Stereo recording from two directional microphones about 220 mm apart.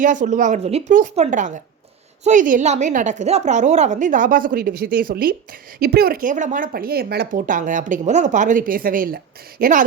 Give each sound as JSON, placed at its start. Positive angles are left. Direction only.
{"t": 0.0, "sound": "speech", "side_deg": -35}